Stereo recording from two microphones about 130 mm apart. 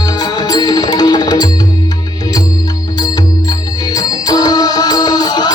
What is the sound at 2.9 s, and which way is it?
Music, 30° left (ahead or behind).